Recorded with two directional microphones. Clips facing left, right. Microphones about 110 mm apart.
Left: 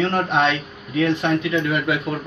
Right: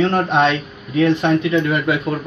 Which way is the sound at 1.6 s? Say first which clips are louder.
Right 3 dB; 40° right (ahead or behind).